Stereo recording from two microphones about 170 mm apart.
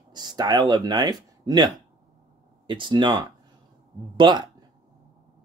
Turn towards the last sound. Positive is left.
turn(degrees=-25)  # may be behind; listen again after turning